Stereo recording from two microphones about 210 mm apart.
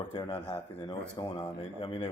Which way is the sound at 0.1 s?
20° left (ahead or behind).